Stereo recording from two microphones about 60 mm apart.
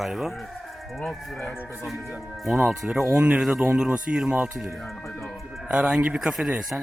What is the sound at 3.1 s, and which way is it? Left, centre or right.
Speech, right.